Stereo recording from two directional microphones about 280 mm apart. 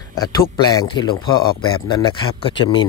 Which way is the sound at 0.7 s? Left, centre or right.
Centre.